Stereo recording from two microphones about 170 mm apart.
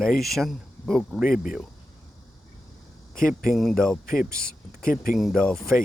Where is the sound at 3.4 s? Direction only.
Centre (ahead or behind).